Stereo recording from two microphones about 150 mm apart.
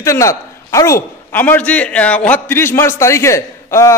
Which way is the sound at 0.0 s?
20° left (ahead or behind).